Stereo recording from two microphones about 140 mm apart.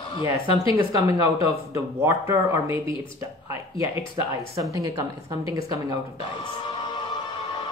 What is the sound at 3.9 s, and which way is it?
Speech, 25° right (ahead or behind).